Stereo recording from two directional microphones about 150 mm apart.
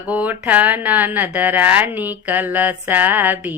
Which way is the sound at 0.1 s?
10° right (ahead or behind).